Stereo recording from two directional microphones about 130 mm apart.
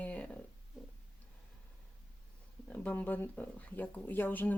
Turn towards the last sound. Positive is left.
turn(degrees=15)  # may be behind; listen again after turning